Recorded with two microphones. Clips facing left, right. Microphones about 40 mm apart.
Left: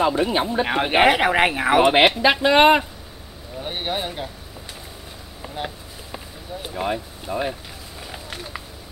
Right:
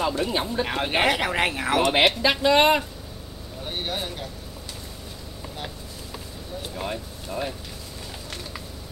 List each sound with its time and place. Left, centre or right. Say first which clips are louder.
0.0 s speech: left 5 dB; left
6.1 s vehicle: left 3 dB; centre
8.1 s a sound: left 4 dB; centre